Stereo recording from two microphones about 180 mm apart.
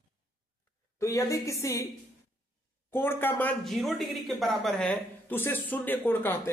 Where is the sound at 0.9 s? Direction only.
15° left (ahead or behind).